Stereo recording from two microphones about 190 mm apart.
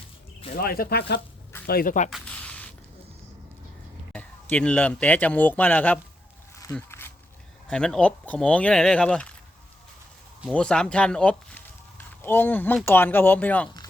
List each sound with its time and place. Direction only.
0.5 s speech: 50° left (ahead or behind)
2.0 s a sound: 5° left (ahead or behind)
4.1 s a man's voice: 10° left (ahead or behind)
6.7 s a sound: 10° left (ahead or behind)
7.7 s speech: 5° left (ahead or behind)
10.5 s speech: 5° left (ahead or behind)